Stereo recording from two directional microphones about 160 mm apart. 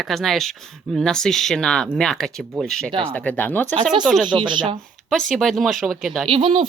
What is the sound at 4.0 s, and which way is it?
Speech, 5° right (ahead or behind).